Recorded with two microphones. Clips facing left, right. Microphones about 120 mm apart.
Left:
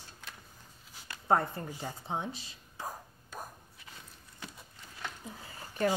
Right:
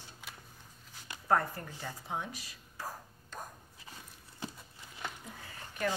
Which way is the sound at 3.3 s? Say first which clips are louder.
Left 1 dB; 10° left (ahead or behind).